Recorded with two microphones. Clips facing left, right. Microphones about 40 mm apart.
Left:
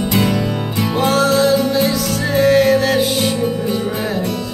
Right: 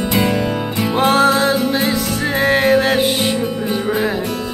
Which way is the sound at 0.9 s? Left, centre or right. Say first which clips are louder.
Right 1 dB; right.